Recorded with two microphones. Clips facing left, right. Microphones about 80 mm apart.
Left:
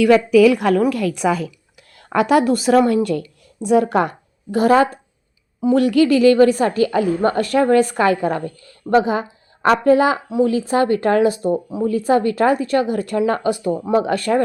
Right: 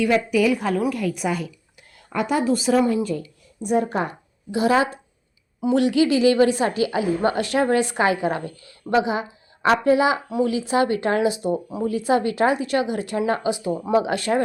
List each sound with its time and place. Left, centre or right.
0.0 s a woman's voice: left
2.5 s a woman's voice: left
4.5 s a woman's voice: left